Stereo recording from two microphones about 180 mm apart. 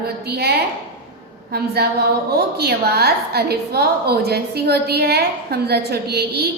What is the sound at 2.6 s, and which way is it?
A woman's voice, 60° right (ahead or behind).